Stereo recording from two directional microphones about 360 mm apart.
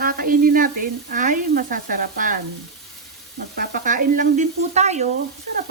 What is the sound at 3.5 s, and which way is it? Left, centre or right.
Sizzle, right.